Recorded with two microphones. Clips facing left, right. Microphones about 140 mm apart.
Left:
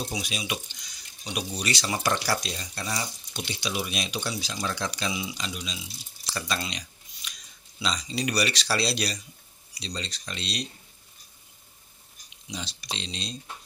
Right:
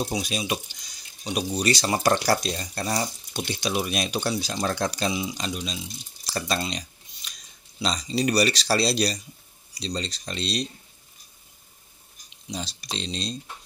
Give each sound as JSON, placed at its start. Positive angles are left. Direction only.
{"t": 0.0, "sound": "speech", "side_deg": -40}
{"t": 6.2, "sound": "a sound", "side_deg": -40}
{"t": 7.8, "sound": "speech", "side_deg": -40}
{"t": 12.4, "sound": "speech", "side_deg": -40}